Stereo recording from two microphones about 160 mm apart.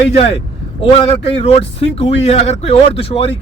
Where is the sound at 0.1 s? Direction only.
40° left (ahead or behind).